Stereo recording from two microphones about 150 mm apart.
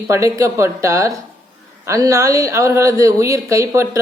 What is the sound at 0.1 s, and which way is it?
Speech, 20° right (ahead or behind).